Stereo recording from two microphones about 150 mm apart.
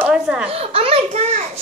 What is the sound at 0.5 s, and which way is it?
Speech, 40° right (ahead or behind).